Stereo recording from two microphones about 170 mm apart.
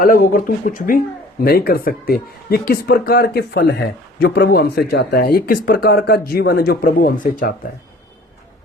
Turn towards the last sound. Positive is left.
turn(degrees=55)  # may be behind; listen again after turning